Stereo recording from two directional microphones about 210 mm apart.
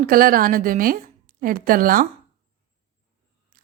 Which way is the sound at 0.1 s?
40° right (ahead or behind).